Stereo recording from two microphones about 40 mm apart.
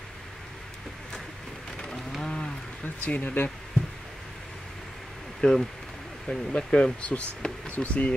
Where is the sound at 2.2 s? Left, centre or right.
Left.